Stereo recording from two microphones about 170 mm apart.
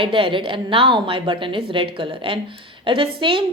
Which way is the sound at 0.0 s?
30° right (ahead or behind).